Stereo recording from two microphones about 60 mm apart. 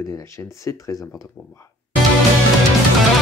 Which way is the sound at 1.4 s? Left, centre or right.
Left.